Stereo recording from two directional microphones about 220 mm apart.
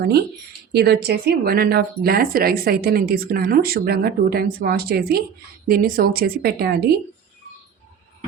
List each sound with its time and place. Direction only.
0.0 s speech: 45° right (ahead or behind)